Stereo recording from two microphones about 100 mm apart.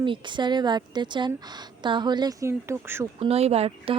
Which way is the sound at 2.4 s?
25° right (ahead or behind).